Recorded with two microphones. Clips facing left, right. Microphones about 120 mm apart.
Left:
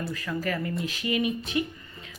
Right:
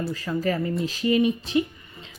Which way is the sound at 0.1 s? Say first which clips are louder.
Right 5 dB; 30° right (ahead or behind).